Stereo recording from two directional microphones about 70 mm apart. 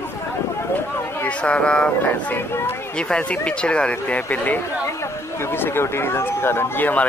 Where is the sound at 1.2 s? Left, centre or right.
Centre.